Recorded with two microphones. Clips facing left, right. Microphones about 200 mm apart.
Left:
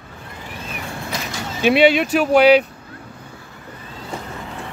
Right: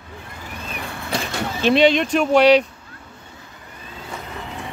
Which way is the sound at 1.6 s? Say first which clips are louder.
Left 2 dB; 10° left (ahead or behind).